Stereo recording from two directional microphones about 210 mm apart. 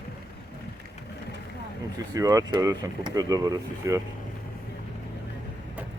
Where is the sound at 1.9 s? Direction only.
15° right (ahead or behind).